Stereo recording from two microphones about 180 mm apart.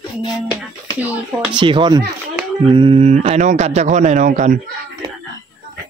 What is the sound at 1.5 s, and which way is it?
Speech, 25° right (ahead or behind).